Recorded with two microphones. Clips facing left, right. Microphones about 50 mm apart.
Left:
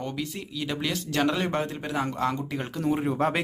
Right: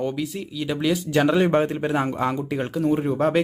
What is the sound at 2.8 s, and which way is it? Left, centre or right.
Speech, centre.